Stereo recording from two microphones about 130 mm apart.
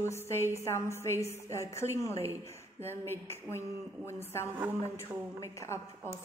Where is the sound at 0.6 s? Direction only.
20° left (ahead or behind).